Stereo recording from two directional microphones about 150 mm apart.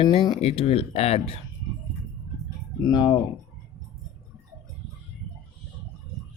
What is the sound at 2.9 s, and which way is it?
Speech, 30° left (ahead or behind).